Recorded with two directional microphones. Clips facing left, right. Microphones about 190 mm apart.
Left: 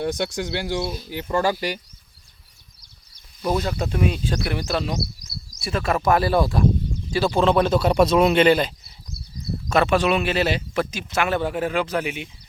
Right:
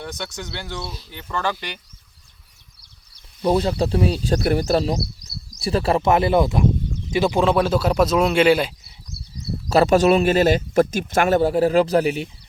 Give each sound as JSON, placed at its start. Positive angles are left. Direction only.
{"t": 0.3, "sound": "speech", "side_deg": 10}
{"t": 1.5, "sound": "speech", "side_deg": 35}
{"t": 3.4, "sound": "speech", "side_deg": -30}
{"t": 9.6, "sound": "speech", "side_deg": -35}